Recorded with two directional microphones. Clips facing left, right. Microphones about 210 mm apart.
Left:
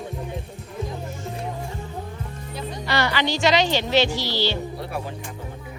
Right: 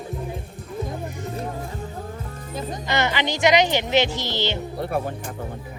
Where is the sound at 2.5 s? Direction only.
45° right (ahead or behind).